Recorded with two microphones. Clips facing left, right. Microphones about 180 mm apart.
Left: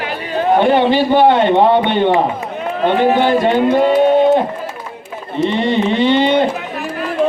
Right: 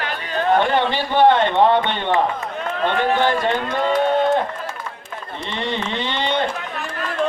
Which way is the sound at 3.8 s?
15° left (ahead or behind).